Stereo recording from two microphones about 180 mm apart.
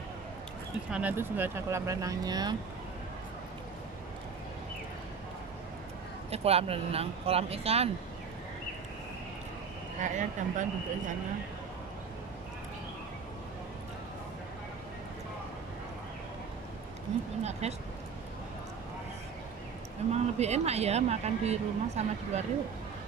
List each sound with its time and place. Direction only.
0.8 s speech: 5° right (ahead or behind)
6.3 s speech: 35° right (ahead or behind)
10.0 s speech: 45° right (ahead or behind)
17.4 s speech: 35° right (ahead or behind)
20.1 s speech: 35° right (ahead or behind)